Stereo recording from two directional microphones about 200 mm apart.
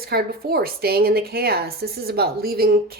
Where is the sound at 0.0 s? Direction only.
50° right (ahead or behind).